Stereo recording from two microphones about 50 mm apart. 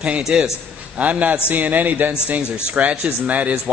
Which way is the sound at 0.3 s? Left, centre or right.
Right.